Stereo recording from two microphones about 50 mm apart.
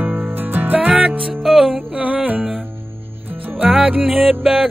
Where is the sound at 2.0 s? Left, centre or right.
Right.